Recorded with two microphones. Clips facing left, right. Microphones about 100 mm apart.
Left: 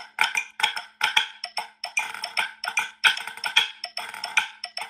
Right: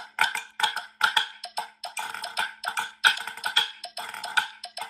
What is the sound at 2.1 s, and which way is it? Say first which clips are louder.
Music: even; 15° right (ahead or behind).